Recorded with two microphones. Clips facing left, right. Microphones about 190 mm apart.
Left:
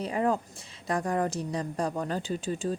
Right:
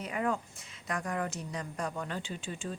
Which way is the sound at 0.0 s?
35° left (ahead or behind).